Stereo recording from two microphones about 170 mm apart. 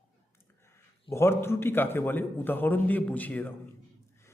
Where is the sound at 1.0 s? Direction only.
15° left (ahead or behind).